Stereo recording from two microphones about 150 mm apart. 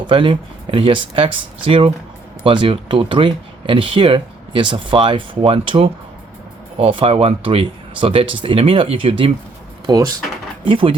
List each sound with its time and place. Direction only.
0.1 s speech: 35° right (ahead or behind)
9.8 s speech: 25° right (ahead or behind)
10.6 s speech: 35° right (ahead or behind)